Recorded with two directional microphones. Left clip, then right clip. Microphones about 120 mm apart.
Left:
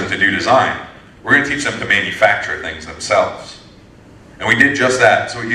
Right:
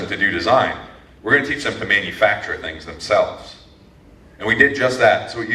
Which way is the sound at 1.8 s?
45° left (ahead or behind).